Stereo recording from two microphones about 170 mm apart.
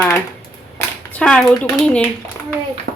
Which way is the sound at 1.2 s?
5° left (ahead or behind).